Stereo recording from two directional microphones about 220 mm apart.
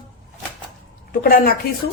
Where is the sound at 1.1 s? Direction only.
40° left (ahead or behind).